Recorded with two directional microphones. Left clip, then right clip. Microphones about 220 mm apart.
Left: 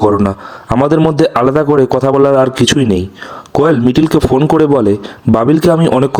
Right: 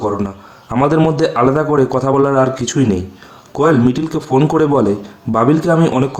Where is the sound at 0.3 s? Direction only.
35° left (ahead or behind).